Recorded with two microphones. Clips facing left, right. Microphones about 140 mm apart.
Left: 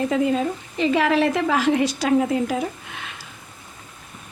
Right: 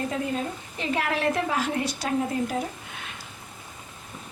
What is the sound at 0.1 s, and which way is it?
A woman's voice, 90° left.